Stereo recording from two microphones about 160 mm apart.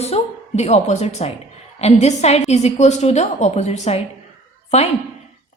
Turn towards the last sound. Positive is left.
turn(degrees=40)  # may be behind; listen again after turning